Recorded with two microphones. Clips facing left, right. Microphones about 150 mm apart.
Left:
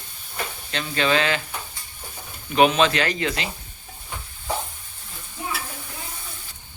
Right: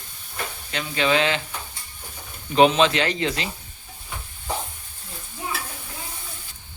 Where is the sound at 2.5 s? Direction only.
25° right (ahead or behind).